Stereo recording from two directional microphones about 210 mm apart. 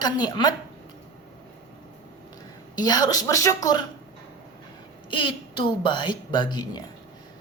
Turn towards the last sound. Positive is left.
turn(degrees=20)  # may be behind; listen again after turning